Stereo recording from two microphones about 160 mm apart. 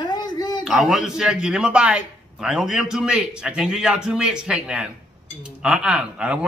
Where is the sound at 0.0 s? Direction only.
25° left (ahead or behind).